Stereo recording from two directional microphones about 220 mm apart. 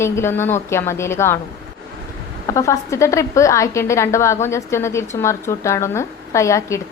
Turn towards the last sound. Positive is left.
turn(degrees=15)  # may be behind; listen again after turning